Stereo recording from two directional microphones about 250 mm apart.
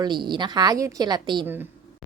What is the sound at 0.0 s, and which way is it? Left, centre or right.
A woman's voice, centre.